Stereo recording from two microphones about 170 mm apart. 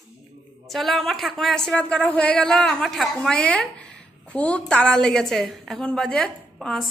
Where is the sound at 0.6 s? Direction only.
Centre (ahead or behind).